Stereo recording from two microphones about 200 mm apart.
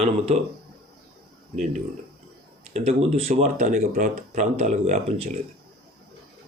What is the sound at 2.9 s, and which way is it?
Speech, 30° right (ahead or behind).